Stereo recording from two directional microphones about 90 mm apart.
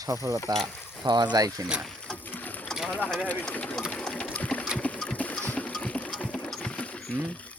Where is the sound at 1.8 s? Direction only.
5° left (ahead or behind).